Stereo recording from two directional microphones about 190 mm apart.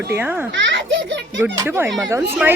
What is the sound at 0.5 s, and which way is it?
Children playing, 70° right (ahead or behind).